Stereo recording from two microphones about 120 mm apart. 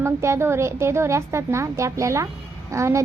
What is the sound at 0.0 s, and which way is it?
A child's voice, 20° right (ahead or behind).